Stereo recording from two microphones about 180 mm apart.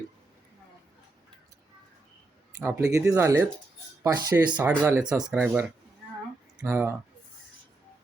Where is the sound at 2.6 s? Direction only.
15° right (ahead or behind).